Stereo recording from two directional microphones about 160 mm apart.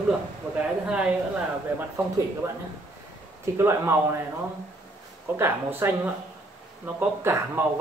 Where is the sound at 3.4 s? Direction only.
15° right (ahead or behind).